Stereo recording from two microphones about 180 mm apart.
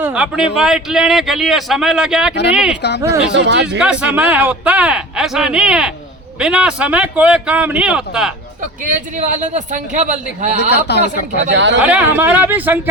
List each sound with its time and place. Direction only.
0.0 s speech: 5° right (ahead or behind)
3.3 s speech: 80° right
3.8 s speech: 5° right (ahead or behind)
8.8 s a man's voice: 45° right (ahead or behind)
10.7 s a man's voice: 70° left (ahead or behind)
11.3 s speech: 85° right
11.9 s speech: 10° right (ahead or behind)